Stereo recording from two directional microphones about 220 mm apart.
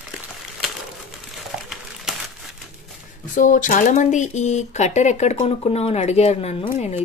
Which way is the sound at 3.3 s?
35° left (ahead or behind).